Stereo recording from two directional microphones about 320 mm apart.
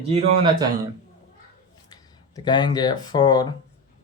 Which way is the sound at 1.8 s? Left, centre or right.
Centre.